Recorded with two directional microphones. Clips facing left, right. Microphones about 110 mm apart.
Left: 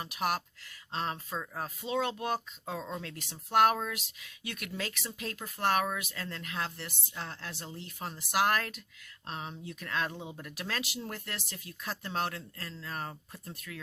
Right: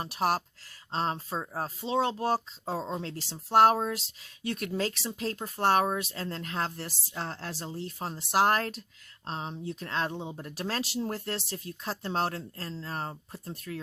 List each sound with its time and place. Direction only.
0.0 s speech: 35° right (ahead or behind)